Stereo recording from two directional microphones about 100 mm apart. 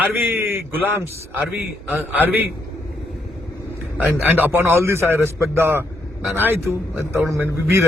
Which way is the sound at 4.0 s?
15° right (ahead or behind).